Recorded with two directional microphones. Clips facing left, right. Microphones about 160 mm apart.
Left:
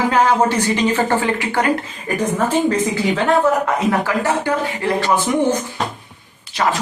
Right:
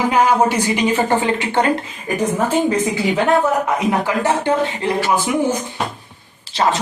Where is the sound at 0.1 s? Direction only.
10° right (ahead or behind).